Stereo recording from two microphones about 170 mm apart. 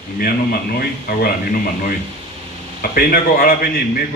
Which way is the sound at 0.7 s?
60° left (ahead or behind).